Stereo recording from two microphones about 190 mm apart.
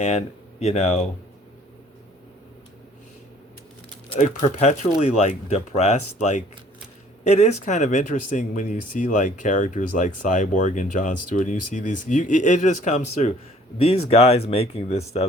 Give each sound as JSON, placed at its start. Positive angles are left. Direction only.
{"t": 0.0, "sound": "speech", "side_deg": 35}
{"t": 4.1, "sound": "speech", "side_deg": 35}